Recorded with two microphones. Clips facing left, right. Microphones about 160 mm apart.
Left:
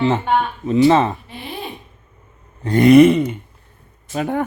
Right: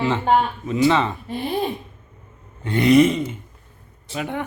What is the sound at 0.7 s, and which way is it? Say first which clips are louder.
Speech: left 5 dB; 40° left (ahead or behind).